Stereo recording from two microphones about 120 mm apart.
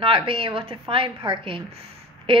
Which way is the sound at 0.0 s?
50° right (ahead or behind).